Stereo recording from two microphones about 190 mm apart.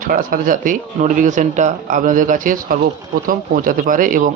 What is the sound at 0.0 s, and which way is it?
Speech, 45° right (ahead or behind).